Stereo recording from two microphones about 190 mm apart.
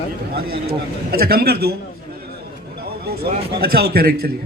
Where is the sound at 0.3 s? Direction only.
55° right (ahead or behind).